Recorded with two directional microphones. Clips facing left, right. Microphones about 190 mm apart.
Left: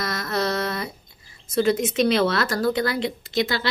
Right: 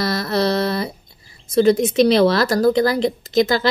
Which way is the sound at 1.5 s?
35° right (ahead or behind).